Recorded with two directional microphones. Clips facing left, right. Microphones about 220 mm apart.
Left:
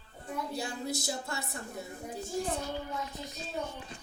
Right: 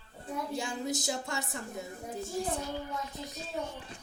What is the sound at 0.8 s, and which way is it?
Music, 20° right (ahead or behind).